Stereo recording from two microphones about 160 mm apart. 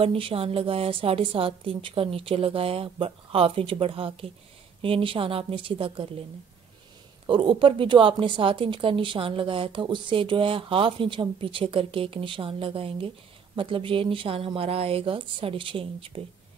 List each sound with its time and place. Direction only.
0.0 s speech: 35° right (ahead or behind)
7.2 s speech: 30° right (ahead or behind)